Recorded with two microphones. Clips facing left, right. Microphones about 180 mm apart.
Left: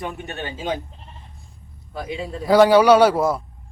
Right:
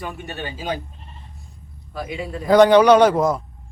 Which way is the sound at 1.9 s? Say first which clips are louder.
Even; 30° left (ahead or behind).